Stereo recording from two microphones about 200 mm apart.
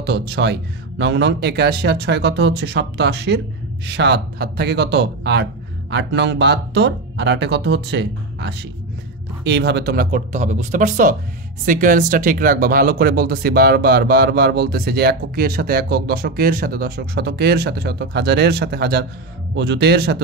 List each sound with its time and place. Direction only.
0.0 s speech: 55° right (ahead or behind)